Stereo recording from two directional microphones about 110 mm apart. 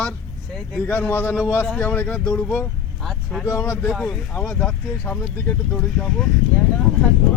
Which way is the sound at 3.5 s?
25° left (ahead or behind).